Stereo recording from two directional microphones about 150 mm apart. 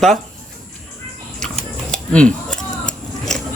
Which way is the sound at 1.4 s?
5° left (ahead or behind).